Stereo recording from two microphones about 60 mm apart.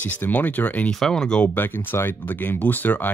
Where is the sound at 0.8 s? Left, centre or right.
Centre.